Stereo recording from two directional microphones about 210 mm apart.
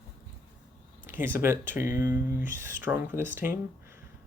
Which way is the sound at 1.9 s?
40° left (ahead or behind).